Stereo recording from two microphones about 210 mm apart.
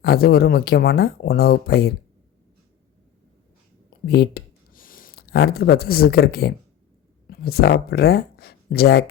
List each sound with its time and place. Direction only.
0.0 s speech: 45° left (ahead or behind)
3.8 s a sound: 50° left (ahead or behind)
7.3 s speech: 50° left (ahead or behind)